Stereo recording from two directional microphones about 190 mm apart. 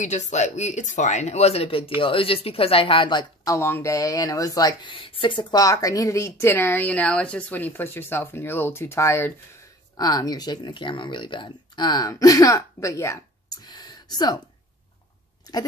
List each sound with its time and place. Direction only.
0.0 s speech: 40° left (ahead or behind); by 14.4 s 20° left (ahead or behind)
15.5 s chewing: 20° left (ahead or behind)